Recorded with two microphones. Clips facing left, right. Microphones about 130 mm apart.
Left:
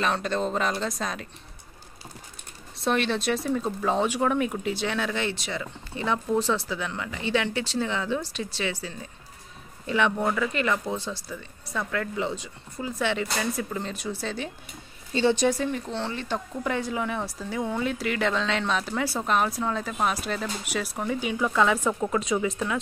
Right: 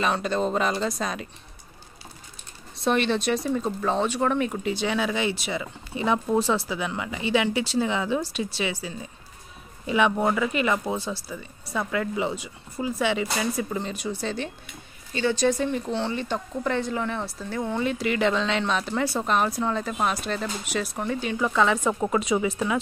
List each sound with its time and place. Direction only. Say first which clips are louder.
0.0 s speech: right 2 dB; 5° right (ahead or behind)
2.8 s speech: right 2 dB; centre (ahead or behind)
15.1 s speech: left 3 dB; 25° left (ahead or behind)
15.4 s speech: right 1 dB; 5° left (ahead or behind)